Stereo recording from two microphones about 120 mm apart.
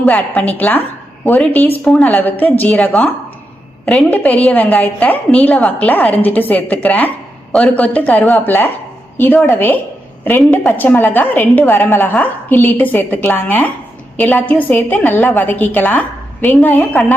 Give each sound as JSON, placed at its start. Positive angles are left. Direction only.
{"t": 0.0, "sound": "a woman's voice", "side_deg": 10}